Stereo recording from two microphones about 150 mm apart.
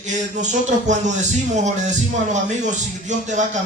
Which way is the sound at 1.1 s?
55° right (ahead or behind).